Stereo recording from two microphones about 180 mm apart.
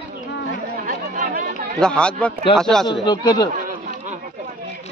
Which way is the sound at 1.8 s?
5° left (ahead or behind).